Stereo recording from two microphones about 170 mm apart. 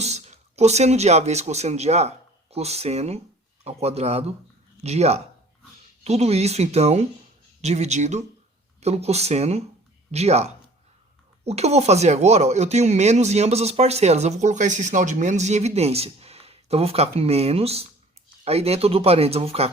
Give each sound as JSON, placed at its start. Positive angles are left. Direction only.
{"t": 0.0, "sound": "speech", "side_deg": -40}